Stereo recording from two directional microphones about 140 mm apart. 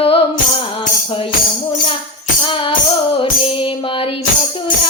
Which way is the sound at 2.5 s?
40° left (ahead or behind).